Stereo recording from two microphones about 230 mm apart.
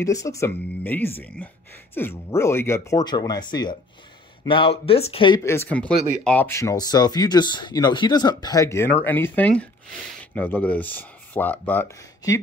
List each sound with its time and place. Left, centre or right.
0.0 s speech: centre